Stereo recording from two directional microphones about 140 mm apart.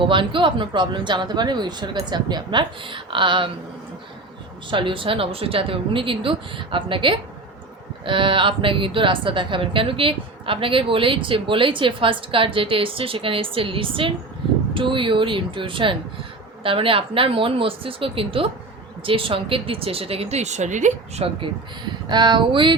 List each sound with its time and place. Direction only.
0.0 s speech: 35° right (ahead or behind)
4.7 s speech: 35° right (ahead or behind)